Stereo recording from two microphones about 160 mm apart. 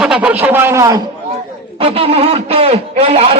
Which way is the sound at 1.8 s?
35° right (ahead or behind).